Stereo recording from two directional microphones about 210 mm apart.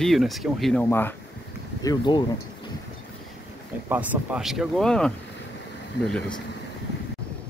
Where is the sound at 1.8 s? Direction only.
20° left (ahead or behind).